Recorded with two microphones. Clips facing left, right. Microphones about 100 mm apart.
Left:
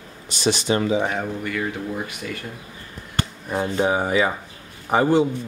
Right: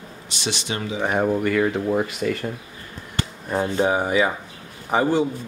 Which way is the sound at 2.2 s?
50° right (ahead or behind).